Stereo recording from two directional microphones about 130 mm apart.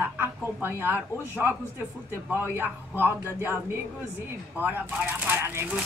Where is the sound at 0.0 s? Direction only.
15° right (ahead or behind).